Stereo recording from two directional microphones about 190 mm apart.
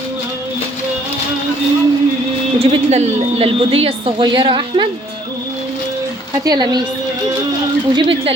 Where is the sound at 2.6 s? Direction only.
35° right (ahead or behind).